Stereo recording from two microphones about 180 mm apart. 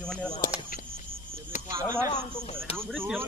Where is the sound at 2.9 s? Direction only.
5° right (ahead or behind).